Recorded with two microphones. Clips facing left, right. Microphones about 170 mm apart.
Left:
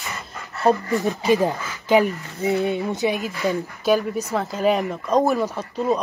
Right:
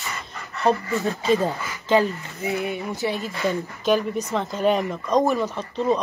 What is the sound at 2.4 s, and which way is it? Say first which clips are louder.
Speech: left 5 dB; 30° left (ahead or behind).